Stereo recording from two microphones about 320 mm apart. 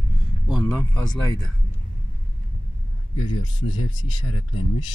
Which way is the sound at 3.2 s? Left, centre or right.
Left.